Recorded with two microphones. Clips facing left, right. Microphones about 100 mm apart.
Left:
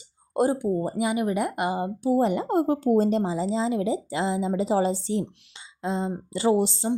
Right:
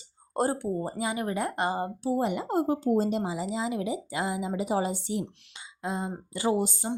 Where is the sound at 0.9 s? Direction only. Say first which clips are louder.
Left 5 dB; 20° left (ahead or behind).